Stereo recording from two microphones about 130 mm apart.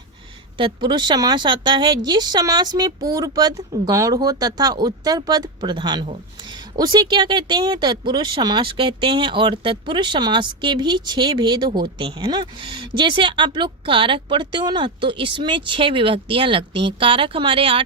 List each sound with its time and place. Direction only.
0.5 s speech: 40° right (ahead or behind)